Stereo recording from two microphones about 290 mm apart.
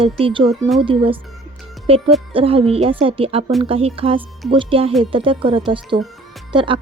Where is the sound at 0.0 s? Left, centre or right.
Centre.